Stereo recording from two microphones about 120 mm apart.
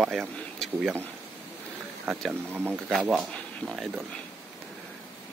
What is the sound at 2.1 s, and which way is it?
Speech, centre (ahead or behind).